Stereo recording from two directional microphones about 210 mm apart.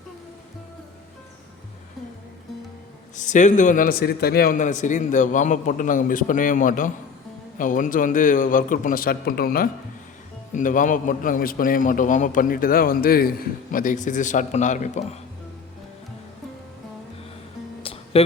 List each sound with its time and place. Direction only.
3.2 s a man's voice: 35° left (ahead or behind)
17.8 s music: 25° left (ahead or behind)